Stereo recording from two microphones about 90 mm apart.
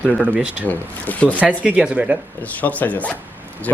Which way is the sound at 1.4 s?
15° right (ahead or behind).